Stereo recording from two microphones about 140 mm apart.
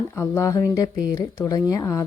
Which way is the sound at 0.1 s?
20° left (ahead or behind).